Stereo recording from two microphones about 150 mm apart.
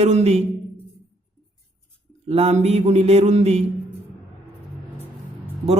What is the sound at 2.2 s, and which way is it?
Mantra, 45° right (ahead or behind).